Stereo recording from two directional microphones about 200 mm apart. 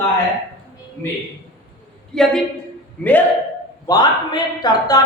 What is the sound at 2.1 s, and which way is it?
A man's voice, 5° left (ahead or behind).